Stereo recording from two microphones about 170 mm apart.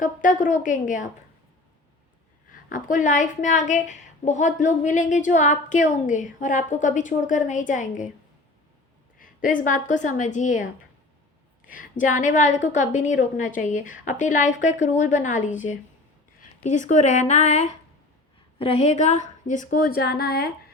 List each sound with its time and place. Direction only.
0.0 s a woman's voice: 50° left (ahead or behind)
2.5 s a woman's voice: 50° left (ahead or behind)
9.1 s a woman's voice: 50° left (ahead or behind)